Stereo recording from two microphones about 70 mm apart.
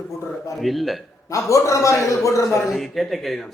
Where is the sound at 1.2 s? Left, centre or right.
Left.